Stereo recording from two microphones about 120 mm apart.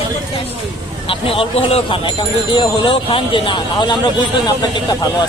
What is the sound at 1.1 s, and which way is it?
Speech, 50° left (ahead or behind).